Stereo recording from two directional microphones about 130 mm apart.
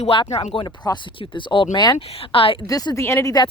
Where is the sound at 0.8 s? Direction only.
25° left (ahead or behind).